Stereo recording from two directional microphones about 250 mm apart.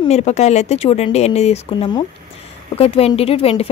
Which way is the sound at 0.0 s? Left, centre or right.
Left.